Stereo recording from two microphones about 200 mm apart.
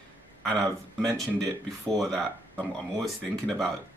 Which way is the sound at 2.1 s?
5° left (ahead or behind).